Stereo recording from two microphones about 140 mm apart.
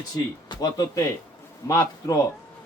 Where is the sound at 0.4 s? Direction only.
25° left (ahead or behind).